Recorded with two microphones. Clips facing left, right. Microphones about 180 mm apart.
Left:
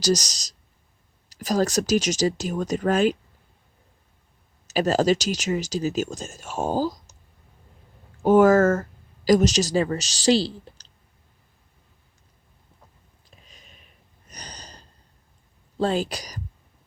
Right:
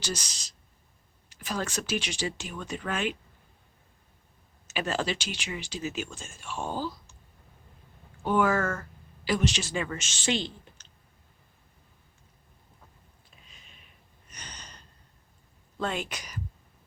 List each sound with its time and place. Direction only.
0.0 s speech: 40° left (ahead or behind)
4.7 s speech: 40° left (ahead or behind)
8.2 s speech: 40° left (ahead or behind)
13.5 s a sound: 40° left (ahead or behind)
14.3 s snort: 35° left (ahead or behind)
15.8 s speech: 35° left (ahead or behind)